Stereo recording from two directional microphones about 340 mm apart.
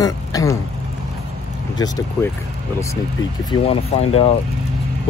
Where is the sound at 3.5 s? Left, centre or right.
Centre.